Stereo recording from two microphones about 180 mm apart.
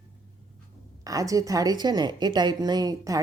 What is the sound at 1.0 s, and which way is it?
A woman's voice, 20° right (ahead or behind).